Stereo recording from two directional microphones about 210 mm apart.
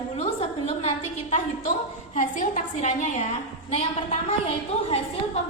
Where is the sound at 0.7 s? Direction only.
30° left (ahead or behind).